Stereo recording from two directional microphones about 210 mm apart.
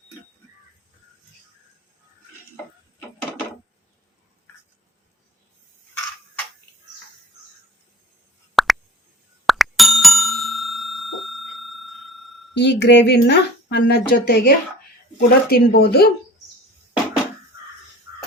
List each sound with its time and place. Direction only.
8.5 s plop: centre (ahead or behind)
12.5 s speech: 55° left (ahead or behind)